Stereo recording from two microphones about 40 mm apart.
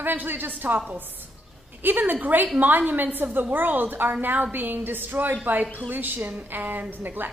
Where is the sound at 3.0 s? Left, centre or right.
Right.